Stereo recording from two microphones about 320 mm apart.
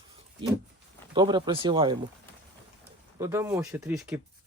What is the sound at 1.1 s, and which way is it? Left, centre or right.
Speech, centre.